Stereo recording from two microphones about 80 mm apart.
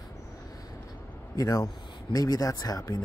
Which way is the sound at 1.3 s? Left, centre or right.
Left.